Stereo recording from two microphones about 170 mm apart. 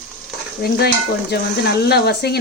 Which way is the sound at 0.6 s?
70° left (ahead or behind).